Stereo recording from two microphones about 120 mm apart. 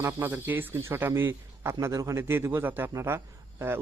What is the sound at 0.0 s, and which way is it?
Speech, 20° right (ahead or behind).